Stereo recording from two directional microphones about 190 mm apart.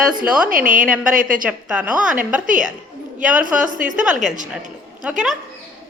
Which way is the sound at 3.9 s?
5° right (ahead or behind).